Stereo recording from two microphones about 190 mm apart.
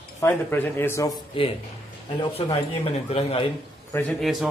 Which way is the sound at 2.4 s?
30° left (ahead or behind).